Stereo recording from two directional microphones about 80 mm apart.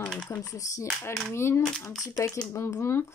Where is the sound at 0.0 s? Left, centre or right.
Centre.